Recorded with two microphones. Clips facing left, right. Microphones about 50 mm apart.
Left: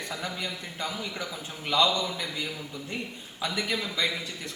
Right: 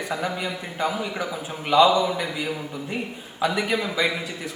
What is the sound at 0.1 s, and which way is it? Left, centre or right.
A man's voice, centre.